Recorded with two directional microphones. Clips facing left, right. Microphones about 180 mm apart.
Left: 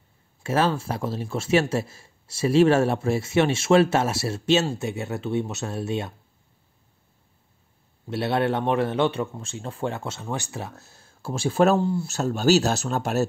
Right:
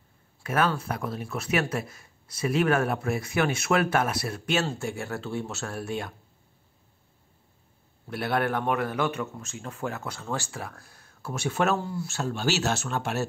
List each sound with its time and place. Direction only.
0.4 s speech: 25° left (ahead or behind)
8.1 s speech: 25° left (ahead or behind)
12.2 s speech: 40° left (ahead or behind)